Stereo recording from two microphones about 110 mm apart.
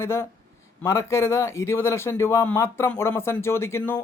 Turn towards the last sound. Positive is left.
turn(degrees=20)  # may be behind; listen again after turning